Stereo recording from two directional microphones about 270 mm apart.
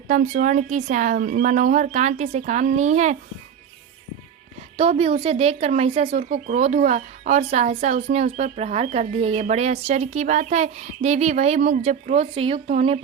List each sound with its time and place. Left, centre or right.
0.1 s speech: right
4.8 s speech: right